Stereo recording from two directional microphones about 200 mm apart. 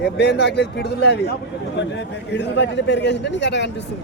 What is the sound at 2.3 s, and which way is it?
A man's voice, 60° left (ahead or behind).